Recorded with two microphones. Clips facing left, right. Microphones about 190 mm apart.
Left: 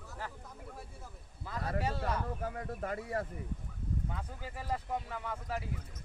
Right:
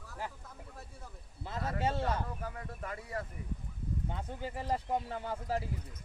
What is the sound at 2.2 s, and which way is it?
Speech, 40° left (ahead or behind).